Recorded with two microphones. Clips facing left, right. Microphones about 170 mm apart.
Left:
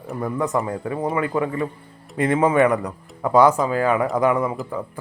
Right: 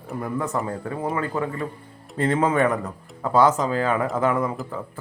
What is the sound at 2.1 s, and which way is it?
Speech, 15° left (ahead or behind).